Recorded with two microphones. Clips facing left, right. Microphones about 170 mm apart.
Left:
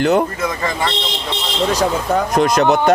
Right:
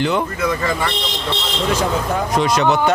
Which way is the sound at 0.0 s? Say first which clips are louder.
Left 4 dB; 45° left (ahead or behind).